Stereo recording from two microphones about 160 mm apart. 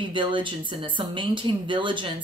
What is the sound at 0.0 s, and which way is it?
Speech, 30° right (ahead or behind).